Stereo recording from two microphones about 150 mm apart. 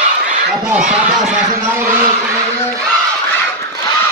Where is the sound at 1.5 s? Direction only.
15° right (ahead or behind).